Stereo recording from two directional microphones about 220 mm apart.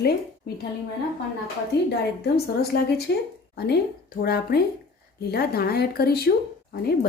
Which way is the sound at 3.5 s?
45° left (ahead or behind).